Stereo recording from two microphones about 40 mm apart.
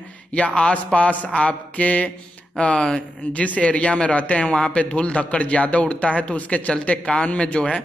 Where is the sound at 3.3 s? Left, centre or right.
Left.